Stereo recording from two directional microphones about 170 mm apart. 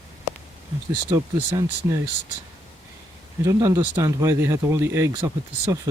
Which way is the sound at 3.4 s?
20° right (ahead or behind).